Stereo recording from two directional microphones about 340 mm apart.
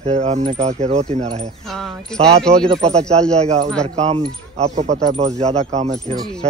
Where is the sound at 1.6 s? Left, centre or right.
Centre.